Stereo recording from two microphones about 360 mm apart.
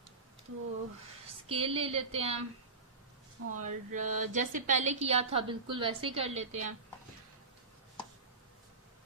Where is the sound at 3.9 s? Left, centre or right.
Right.